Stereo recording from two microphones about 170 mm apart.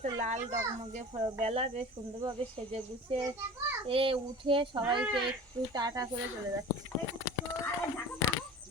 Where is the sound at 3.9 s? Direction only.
30° right (ahead or behind).